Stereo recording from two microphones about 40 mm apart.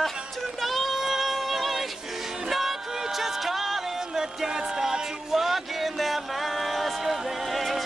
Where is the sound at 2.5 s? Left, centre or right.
Centre.